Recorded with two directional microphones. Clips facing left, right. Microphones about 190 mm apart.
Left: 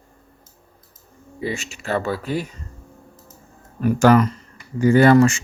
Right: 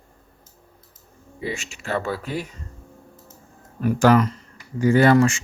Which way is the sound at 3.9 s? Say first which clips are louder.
Left 2 dB; 50° left (ahead or behind).